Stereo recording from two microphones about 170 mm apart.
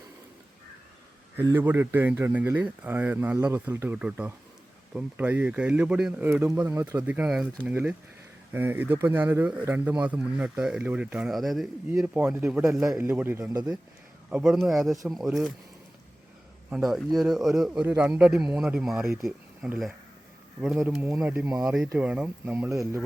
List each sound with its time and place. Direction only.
1.4 s speech: 15° right (ahead or behind)
11.9 s speech: 10° right (ahead or behind)
16.6 s speech: 5° right (ahead or behind)
22.7 s speech: 15° right (ahead or behind)